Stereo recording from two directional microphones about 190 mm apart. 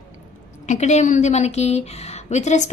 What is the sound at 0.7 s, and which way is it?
A woman's voice, 35° left (ahead or behind).